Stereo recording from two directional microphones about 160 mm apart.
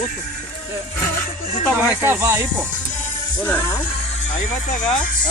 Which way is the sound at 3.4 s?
10° left (ahead or behind).